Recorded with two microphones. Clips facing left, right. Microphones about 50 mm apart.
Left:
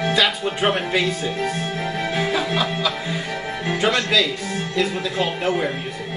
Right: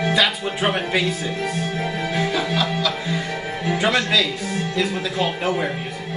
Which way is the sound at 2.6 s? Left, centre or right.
Centre.